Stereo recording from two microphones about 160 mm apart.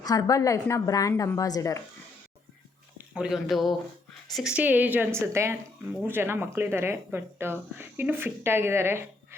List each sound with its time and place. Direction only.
0.0 s a woman's voice: 20° left (ahead or behind)
3.2 s speech: centre (ahead or behind)